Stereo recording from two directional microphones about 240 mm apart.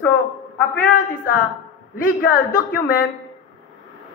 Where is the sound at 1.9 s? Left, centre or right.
Left.